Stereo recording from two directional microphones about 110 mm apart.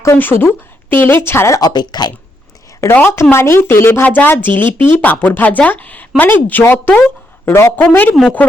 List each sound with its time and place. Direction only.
0.0 s speech: 20° left (ahead or behind)
1.7 s speech: 40° left (ahead or behind)
2.8 s a woman's voice: 20° left (ahead or behind)